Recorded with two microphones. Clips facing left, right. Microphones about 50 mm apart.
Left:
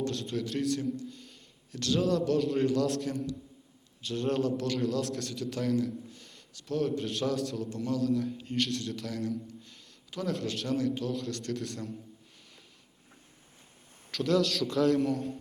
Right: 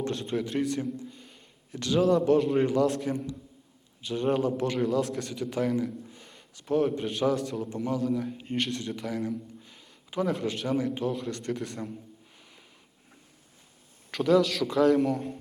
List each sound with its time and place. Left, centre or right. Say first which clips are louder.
0.0 s a man's voice: right 3 dB; right
14.2 s a man's voice: right 4 dB; centre